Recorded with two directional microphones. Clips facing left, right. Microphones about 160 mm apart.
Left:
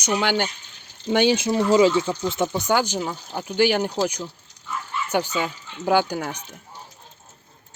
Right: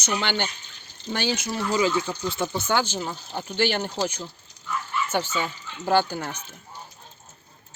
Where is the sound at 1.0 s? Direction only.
15° left (ahead or behind).